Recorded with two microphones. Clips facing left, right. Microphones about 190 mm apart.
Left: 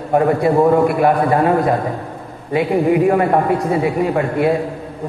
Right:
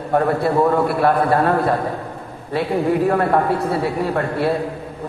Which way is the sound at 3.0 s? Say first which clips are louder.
Left 3 dB; 10° left (ahead or behind).